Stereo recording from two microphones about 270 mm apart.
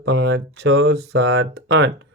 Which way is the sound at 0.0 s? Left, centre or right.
Right.